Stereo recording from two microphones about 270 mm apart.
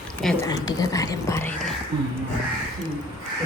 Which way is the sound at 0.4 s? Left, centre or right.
Centre.